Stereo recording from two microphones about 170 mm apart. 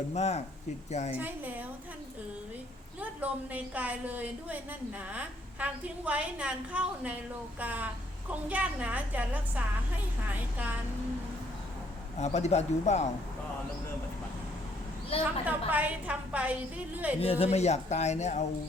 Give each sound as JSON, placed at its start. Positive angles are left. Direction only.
{"t": 0.1, "sound": "speech", "side_deg": 40}
{"t": 1.1, "sound": "a woman's voice", "side_deg": -10}
{"t": 3.0, "sound": "a woman's voice", "side_deg": -10}
{"t": 12.2, "sound": "speech", "side_deg": 40}
{"t": 15.2, "sound": "a woman's voice", "side_deg": -10}
{"t": 17.2, "sound": "speech", "side_deg": 35}